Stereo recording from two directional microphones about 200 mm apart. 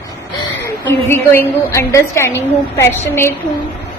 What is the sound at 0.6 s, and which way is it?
A woman's voice, 10° left (ahead or behind).